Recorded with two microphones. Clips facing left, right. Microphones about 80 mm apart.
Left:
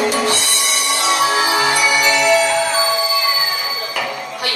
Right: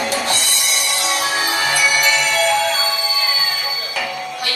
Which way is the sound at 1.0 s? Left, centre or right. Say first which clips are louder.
Left 6 dB; left.